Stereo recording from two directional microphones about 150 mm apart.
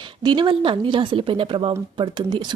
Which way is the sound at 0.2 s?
30° right (ahead or behind).